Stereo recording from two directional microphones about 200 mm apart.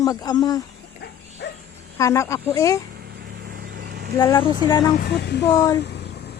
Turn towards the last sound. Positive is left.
turn(degrees=55)  # may be behind; listen again after turning